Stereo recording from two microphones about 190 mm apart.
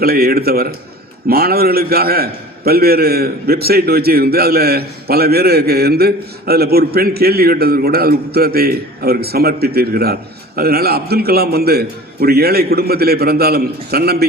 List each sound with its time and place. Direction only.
0.0 s a man's voice: 55° right (ahead or behind)